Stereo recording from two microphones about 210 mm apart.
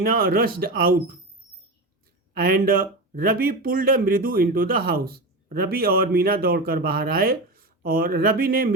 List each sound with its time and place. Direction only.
0.0 s speech: 45° right (ahead or behind)
2.3 s speech: 45° right (ahead or behind)